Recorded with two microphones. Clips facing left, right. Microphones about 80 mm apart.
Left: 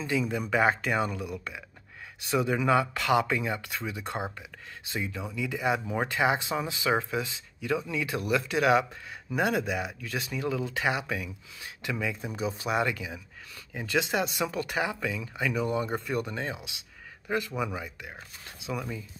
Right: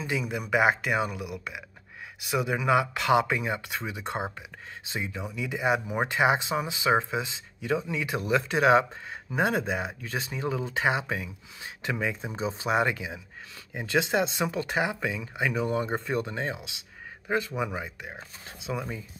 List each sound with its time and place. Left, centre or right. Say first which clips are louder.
0.0 s speech: left 2 dB; centre